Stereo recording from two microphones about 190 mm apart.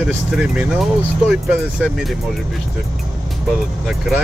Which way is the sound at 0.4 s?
5° right (ahead or behind).